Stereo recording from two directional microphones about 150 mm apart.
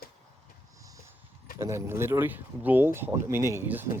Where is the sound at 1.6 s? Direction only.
20° right (ahead or behind).